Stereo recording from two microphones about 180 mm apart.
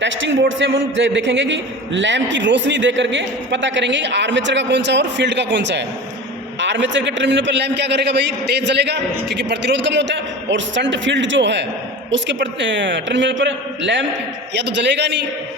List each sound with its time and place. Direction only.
0.0 s a man's voice: 90° right
14.5 s a man's voice: 75° right (ahead or behind)